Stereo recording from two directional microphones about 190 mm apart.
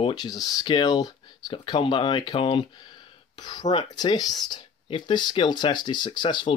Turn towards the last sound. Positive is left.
turn(degrees=25)  # may be behind; listen again after turning